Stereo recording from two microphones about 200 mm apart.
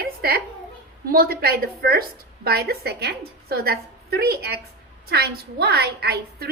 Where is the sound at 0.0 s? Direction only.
50° right (ahead or behind).